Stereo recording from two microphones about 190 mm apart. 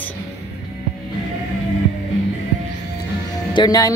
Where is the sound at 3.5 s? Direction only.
20° left (ahead or behind).